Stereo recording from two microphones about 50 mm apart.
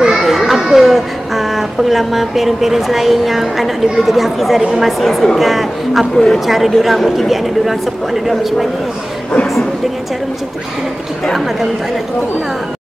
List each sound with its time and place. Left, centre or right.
0.0 s children playing: centre
0.3 s speech: centre
6.1 s a man's voice: centre
6.4 s speech: centre